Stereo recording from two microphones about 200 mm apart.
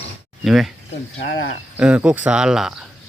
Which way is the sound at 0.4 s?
Centre (ahead or behind).